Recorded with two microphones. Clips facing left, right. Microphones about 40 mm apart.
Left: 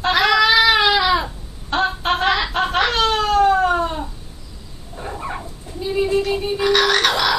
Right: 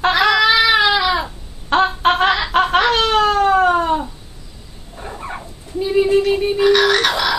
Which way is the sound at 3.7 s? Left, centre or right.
Right.